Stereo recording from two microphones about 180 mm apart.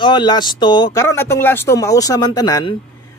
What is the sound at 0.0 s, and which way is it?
A man's voice, 25° left (ahead or behind).